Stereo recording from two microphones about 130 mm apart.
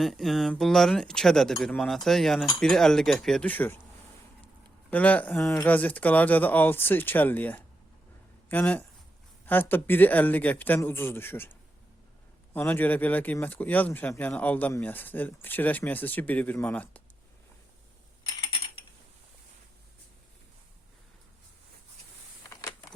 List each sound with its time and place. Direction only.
0.0 s speech: centre (ahead or behind)
4.9 s speech: 10° left (ahead or behind)
12.5 s speech: 15° left (ahead or behind)